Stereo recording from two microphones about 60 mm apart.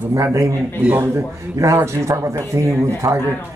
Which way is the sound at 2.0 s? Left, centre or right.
Right.